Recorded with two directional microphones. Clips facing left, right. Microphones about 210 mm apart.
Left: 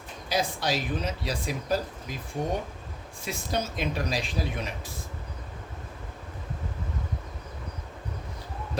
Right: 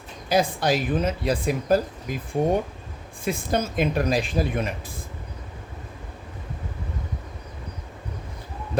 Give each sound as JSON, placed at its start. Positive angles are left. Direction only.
{"t": 0.3, "sound": "speech", "side_deg": -55}